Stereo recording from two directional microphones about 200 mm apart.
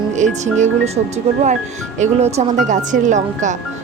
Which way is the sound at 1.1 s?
35° right (ahead or behind).